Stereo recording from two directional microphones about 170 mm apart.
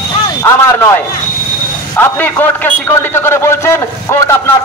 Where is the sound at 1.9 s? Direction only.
10° left (ahead or behind).